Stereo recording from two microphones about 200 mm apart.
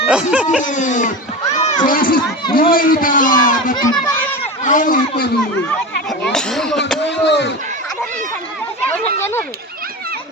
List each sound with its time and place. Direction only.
0.1 s speech: 5° right (ahead or behind)
0.6 s a man's voice: 40° left (ahead or behind)
1.5 s a sound: 30° left (ahead or behind)
1.9 s a man's voice: 45° left (ahead or behind)
6.2 s speech: centre (ahead or behind)
7.0 s speech: 60° left (ahead or behind)
8.9 s speech: 10° left (ahead or behind)